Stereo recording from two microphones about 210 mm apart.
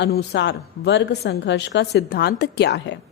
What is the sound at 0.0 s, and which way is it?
A woman's voice, 55° left (ahead or behind).